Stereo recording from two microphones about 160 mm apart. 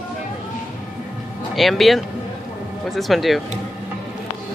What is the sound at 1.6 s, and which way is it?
Speech, centre (ahead or behind).